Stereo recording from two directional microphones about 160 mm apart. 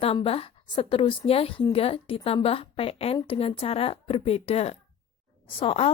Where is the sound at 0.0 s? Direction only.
35° left (ahead or behind).